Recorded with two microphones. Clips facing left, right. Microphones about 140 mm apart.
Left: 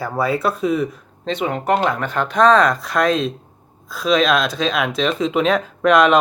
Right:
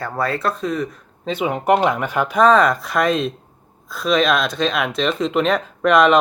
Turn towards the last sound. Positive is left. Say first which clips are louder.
# even
turn(degrees=0)  # may be behind; listen again after turning